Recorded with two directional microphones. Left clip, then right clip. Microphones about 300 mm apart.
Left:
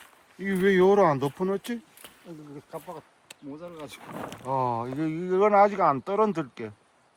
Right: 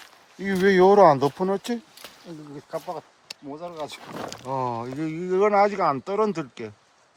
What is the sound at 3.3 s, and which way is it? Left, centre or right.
Speech, centre.